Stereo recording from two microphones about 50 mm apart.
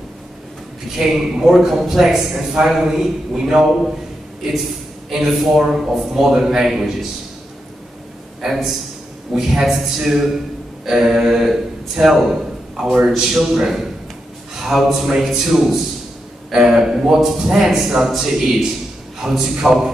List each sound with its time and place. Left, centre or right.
0.9 s a man's voice: centre
5.1 s a man's voice: centre
9.3 s a man's voice: centre